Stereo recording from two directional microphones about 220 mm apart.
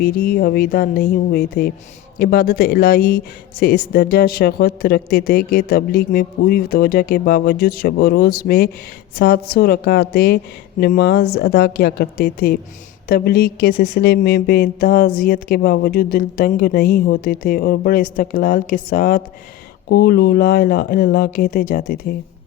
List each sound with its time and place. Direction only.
0.0 s speech: 45° left (ahead or behind)